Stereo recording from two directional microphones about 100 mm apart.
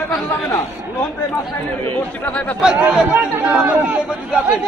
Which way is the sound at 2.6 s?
10° right (ahead or behind).